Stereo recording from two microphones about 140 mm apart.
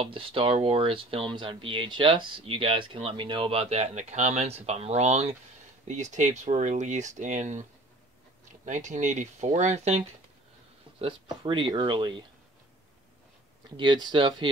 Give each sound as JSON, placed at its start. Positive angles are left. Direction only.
{"t": 0.0, "sound": "speech", "side_deg": -40}
{"t": 8.6, "sound": "speech", "side_deg": -60}
{"t": 11.4, "sound": "speech", "side_deg": -35}
{"t": 13.7, "sound": "speech", "side_deg": -35}